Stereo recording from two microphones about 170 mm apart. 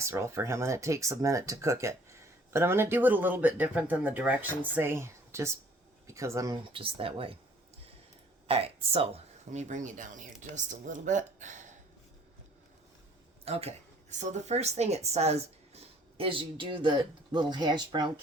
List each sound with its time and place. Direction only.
0.0 s speech: 15° right (ahead or behind)
6.7 s a woman's voice: 30° right (ahead or behind)
8.4 s speech: 35° right (ahead or behind)
13.4 s a woman's voice: 35° right (ahead or behind)